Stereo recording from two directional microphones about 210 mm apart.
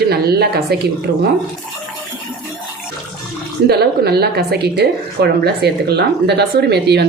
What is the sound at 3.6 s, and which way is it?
A woman's voice, 50° right (ahead or behind).